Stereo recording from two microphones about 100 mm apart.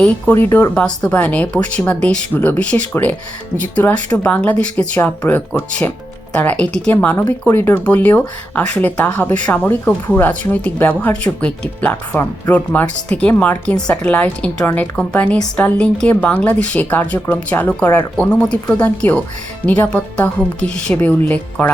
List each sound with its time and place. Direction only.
0.3 s speech: 15° left (ahead or behind)